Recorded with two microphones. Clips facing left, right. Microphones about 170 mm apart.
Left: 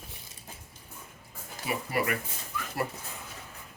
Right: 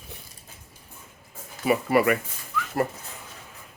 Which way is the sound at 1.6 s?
90° right.